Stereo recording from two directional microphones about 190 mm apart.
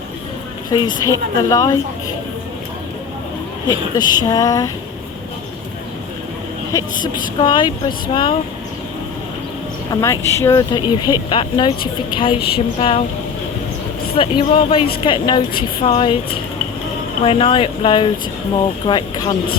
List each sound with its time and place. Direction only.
0.7 s a woman's voice: 20° left (ahead or behind)
3.7 s a woman's voice: 20° left (ahead or behind)
6.7 s a woman's voice: 25° left (ahead or behind)
9.9 s a woman's voice: 15° left (ahead or behind)
14.2 s a woman's voice: 30° left (ahead or behind)
17.2 s a woman's voice: 30° left (ahead or behind)